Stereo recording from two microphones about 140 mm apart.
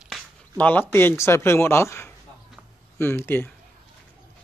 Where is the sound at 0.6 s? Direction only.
15° left (ahead or behind).